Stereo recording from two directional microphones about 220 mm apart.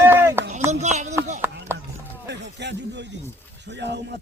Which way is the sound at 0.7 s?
30° right (ahead or behind).